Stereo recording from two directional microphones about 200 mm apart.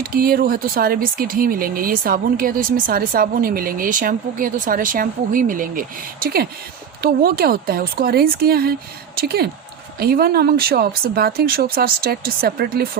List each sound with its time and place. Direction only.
0.0 s speech: 50° right (ahead or behind)